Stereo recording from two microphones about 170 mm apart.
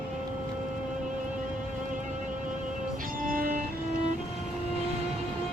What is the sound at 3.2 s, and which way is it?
Music, 55° right (ahead or behind).